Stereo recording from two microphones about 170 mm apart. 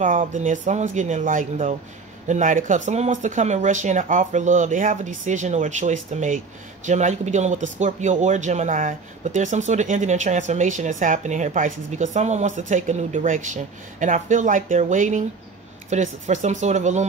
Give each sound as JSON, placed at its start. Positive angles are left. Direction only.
{"t": 0.0, "sound": "speech", "side_deg": -50}